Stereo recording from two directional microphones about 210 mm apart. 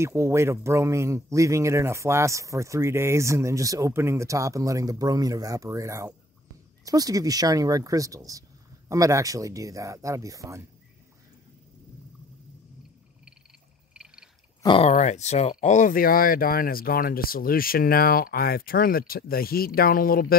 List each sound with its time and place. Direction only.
0.0 s speech: 15° right (ahead or behind)
13.9 s frog: 5° right (ahead or behind)
14.6 s speech: 25° left (ahead or behind); by 20.3 s 45° left (ahead or behind)